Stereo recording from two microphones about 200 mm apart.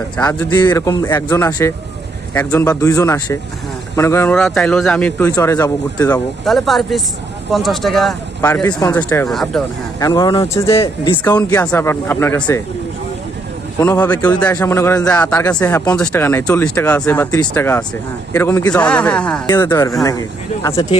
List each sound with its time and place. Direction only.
0.2 s speech: 10° left (ahead or behind)
0.5 s speech: 20° left (ahead or behind)
6.4 s speech: centre (ahead or behind)
10.0 s speech: 20° left (ahead or behind)
10.7 s speech: 25° left (ahead or behind)
11.2 s speech: 10° left (ahead or behind)
13.7 s speech: 10° left (ahead or behind)